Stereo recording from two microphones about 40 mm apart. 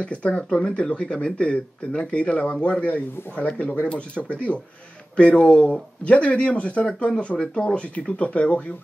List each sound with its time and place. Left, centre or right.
0.0 s speech: left
0.4 s speech: centre
7.3 s speech: centre
7.7 s speech: left